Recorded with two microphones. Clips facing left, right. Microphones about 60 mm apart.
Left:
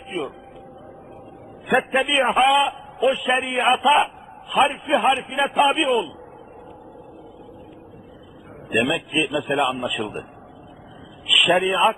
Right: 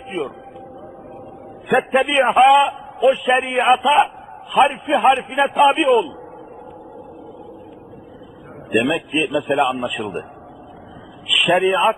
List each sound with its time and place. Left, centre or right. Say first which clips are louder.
1.6 s a man's voice: right 3 dB; centre
3.4 s a man's voice: right 3 dB; centre
3.7 s a man's voice: right 3 dB; centre
8.7 s a man's voice: right 3 dB; centre
11.3 s a man's voice: right 2 dB; centre